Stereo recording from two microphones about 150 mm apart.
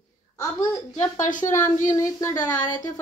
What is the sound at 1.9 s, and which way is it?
Speech, 20° left (ahead or behind).